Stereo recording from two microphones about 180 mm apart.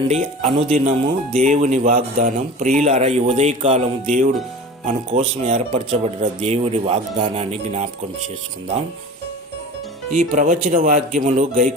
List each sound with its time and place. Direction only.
0.4 s speech: 25° right (ahead or behind)
0.9 s speech: 40° right (ahead or behind)
10.2 s speech: 45° right (ahead or behind)